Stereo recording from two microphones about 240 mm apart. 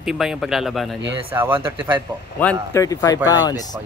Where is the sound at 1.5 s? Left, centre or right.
Right.